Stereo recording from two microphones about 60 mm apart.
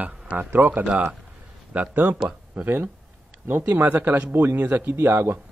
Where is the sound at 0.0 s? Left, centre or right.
Right.